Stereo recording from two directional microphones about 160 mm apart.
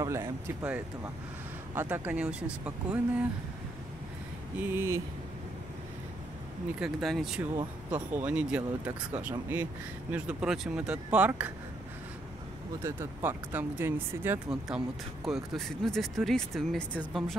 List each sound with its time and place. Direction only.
0.0 s speech: 20° right (ahead or behind)
4.6 s speech: 15° right (ahead or behind)
6.8 s speech: centre (ahead or behind)
12.8 s speech: 15° right (ahead or behind); by 17.4 s 5° left (ahead or behind)